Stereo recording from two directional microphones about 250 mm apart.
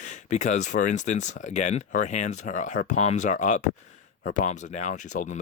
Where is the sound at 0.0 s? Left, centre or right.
Left.